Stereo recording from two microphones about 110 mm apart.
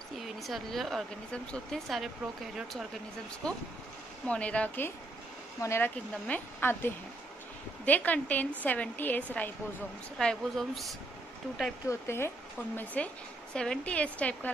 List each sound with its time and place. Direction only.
0.4 s speech: centre (ahead or behind)
3.4 s a woman's voice: 5° left (ahead or behind)
5.6 s a woman's voice: 25° left (ahead or behind)
10.1 s speech: 5° left (ahead or behind)
11.9 s a woman's voice: 20° left (ahead or behind)